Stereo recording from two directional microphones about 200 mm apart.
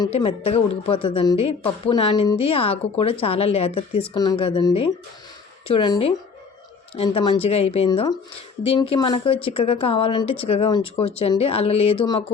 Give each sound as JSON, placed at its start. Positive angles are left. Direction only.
{"t": 0.0, "sound": "a woman's voice", "side_deg": 25}
{"t": 7.9, "sound": "a woman's voice", "side_deg": 20}